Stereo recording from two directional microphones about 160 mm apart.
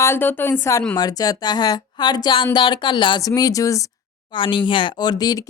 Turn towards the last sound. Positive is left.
turn(degrees=25)  # may be behind; listen again after turning